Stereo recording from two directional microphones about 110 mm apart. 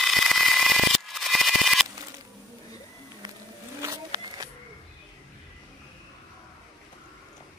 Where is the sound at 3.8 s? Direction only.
35° right (ahead or behind).